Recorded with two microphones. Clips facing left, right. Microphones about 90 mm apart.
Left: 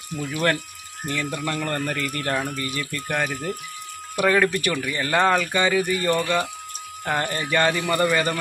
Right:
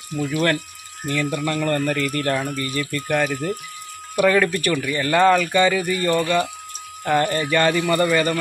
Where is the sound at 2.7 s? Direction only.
15° left (ahead or behind).